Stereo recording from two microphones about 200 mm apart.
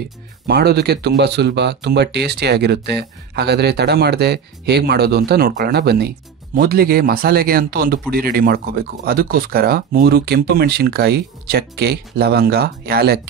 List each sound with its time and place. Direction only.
0.5 s speech: 55° right (ahead or behind)